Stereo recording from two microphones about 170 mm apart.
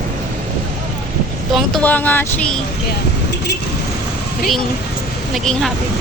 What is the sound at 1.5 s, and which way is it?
Speech, 5° left (ahead or behind).